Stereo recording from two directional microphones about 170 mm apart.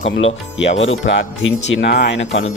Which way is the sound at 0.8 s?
90° left.